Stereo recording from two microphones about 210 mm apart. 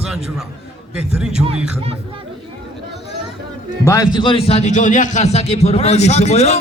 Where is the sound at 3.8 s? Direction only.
15° left (ahead or behind).